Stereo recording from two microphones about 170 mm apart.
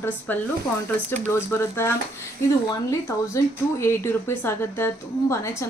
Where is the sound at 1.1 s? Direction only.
15° left (ahead or behind).